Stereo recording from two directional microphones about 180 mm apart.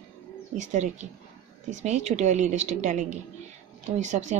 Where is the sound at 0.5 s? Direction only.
40° right (ahead or behind).